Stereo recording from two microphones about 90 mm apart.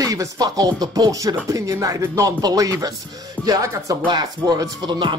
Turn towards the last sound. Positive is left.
turn(degrees=-60)  # may be behind; listen again after turning